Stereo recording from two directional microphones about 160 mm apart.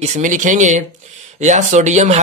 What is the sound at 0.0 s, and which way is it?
A man's voice, 50° right (ahead or behind).